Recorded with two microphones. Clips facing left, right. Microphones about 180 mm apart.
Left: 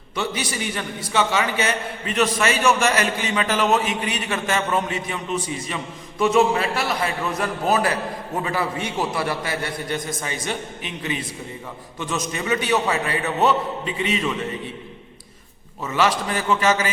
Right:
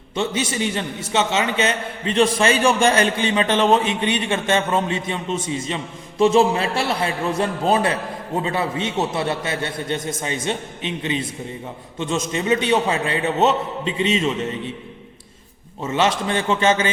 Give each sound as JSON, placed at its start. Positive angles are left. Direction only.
{"t": 0.2, "sound": "a man's voice", "side_deg": -25}
{"t": 15.8, "sound": "a man's voice", "side_deg": -25}